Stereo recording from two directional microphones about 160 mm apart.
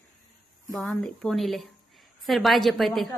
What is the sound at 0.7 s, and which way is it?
A woman's voice, 5° left (ahead or behind).